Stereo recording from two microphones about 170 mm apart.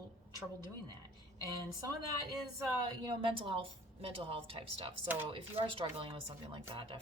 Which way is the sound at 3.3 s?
30° right (ahead or behind).